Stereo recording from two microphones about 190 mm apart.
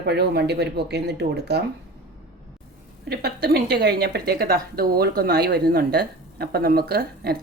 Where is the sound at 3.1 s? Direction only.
55° right (ahead or behind).